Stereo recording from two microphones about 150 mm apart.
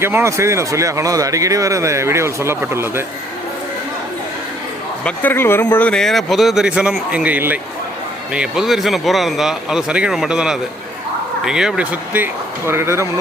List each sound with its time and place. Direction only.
0.0 s speech: 15° right (ahead or behind)
5.0 s speech: 15° left (ahead or behind); by 13.1 s 15° right (ahead or behind)